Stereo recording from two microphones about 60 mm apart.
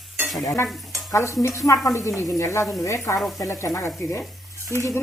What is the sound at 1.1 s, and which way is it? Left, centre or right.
Speech, left.